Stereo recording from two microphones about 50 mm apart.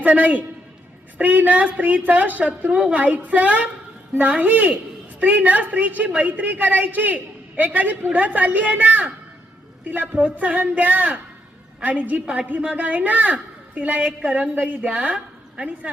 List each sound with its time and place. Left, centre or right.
0.0 s a man's voice: right
14.3 s a woman's voice: centre